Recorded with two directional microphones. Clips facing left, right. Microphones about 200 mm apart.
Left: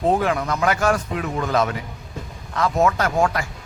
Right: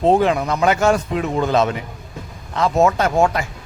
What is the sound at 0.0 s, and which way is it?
A man's voice, 25° right (ahead or behind).